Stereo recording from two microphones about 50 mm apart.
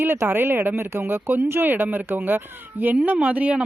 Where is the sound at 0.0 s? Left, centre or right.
Right.